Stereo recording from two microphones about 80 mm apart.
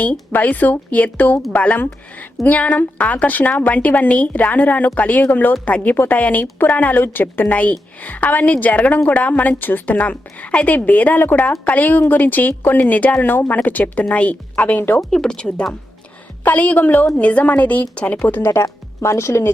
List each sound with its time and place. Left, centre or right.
0.0 s speech: centre
15.1 s a woman's voice: centre; by 18.6 s left
18.6 s speech: left